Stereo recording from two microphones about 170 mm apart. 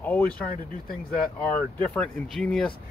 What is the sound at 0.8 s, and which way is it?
Speech, 60° left (ahead or behind).